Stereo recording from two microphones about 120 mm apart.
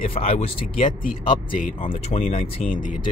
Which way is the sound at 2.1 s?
55° left (ahead or behind).